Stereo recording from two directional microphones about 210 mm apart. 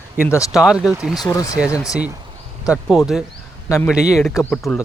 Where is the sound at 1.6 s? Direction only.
5° right (ahead or behind).